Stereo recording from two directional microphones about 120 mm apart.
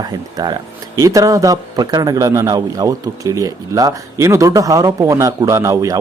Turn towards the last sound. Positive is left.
turn(degrees=-30)  # may be behind; listen again after turning